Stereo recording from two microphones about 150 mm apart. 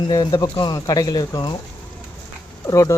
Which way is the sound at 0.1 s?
30° left (ahead or behind).